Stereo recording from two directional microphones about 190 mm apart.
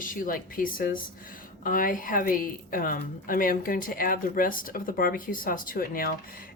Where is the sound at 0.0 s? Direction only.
45° left (ahead or behind).